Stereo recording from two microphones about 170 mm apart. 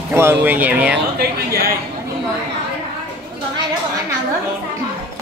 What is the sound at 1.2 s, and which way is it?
Speech, 65° right (ahead or behind).